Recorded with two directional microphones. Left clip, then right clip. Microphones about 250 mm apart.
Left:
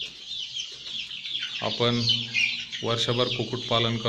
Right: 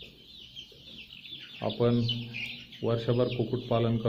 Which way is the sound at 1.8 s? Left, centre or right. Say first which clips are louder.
Left 5 dB; centre.